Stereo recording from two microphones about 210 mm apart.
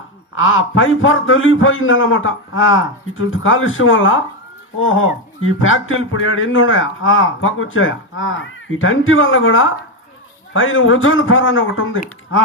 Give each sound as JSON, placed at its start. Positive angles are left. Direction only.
{"t": 0.3, "sound": "speech", "side_deg": 75}